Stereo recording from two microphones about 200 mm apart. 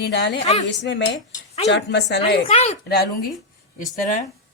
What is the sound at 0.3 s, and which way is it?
Speech, 35° left (ahead or behind).